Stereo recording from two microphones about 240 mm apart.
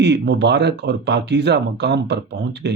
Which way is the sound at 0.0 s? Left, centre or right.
Right.